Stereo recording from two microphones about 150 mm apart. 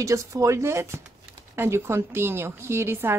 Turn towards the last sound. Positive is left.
turn(degrees=-15)  # may be behind; listen again after turning